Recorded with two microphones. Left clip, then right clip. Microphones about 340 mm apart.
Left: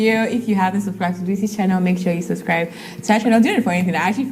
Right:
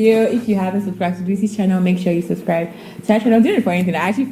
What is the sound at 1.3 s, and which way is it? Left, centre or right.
Speech, left.